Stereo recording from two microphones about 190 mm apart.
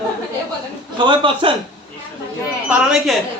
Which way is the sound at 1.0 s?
25° right (ahead or behind).